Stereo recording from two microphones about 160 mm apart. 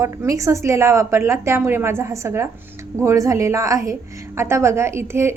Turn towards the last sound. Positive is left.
turn(degrees=-15)  # may be behind; listen again after turning